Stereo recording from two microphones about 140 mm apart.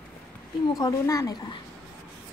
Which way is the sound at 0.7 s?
25° left (ahead or behind).